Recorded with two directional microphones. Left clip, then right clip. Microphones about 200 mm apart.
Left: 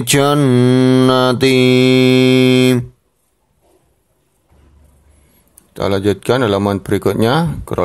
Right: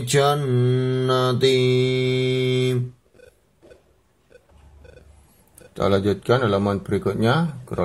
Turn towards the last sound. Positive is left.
turn(degrees=35)  # may be behind; listen again after turning